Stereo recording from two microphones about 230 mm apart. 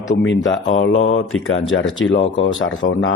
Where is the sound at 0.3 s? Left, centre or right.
Left.